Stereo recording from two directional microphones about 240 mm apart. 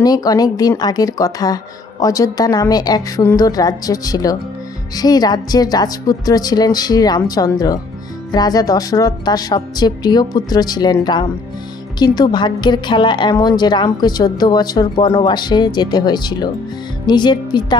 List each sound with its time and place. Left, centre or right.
0.0 s a woman's voice: centre